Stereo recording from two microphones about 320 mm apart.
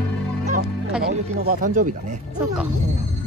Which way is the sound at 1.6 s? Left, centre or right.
Right.